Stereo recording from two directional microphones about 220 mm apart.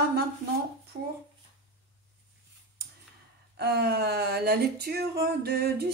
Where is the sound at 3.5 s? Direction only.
45° right (ahead or behind).